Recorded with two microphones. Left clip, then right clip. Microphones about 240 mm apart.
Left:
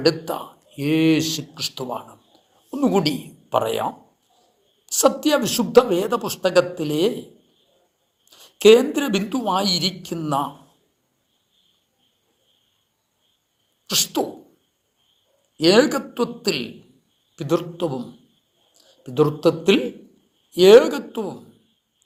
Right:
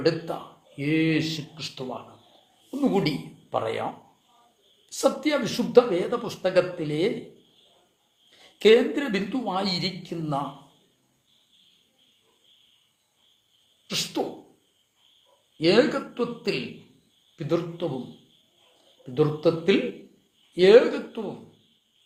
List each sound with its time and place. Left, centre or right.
0.8 s speech: left
4.9 s speech: left
8.5 s speech: left
13.8 s sneeze: left
15.5 s speech: left
19.1 s speech: left